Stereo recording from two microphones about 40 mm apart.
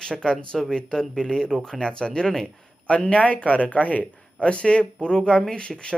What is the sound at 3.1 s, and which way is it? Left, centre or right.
Speech, left.